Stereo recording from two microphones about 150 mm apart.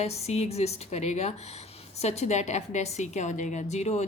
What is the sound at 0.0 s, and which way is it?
Speech, 45° left (ahead or behind).